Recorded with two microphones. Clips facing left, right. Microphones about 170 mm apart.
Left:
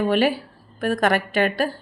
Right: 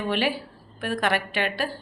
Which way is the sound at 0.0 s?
45° left (ahead or behind).